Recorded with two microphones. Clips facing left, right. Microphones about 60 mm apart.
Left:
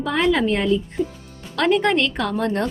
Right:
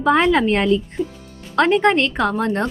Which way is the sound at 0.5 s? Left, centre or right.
Right.